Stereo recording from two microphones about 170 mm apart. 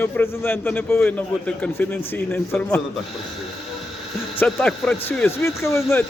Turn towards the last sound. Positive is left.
turn(degrees=15)  # may be behind; listen again after turning